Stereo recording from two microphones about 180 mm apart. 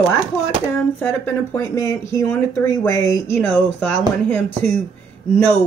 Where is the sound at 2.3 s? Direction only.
15° left (ahead or behind).